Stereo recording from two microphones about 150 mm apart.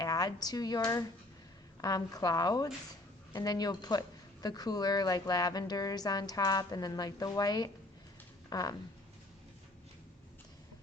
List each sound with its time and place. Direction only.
0.0 s a woman's voice: 25° left (ahead or behind)
1.8 s speech: 25° left (ahead or behind)